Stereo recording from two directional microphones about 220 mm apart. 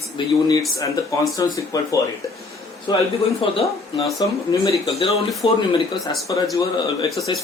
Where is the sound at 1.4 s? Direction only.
15° left (ahead or behind).